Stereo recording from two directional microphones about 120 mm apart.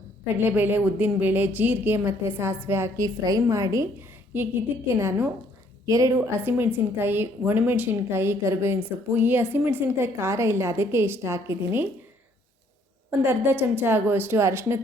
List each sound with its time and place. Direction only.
0.3 s a woman's voice: 15° right (ahead or behind)
4.9 s a woman's voice: 25° right (ahead or behind)
13.1 s a woman's voice: 15° right (ahead or behind)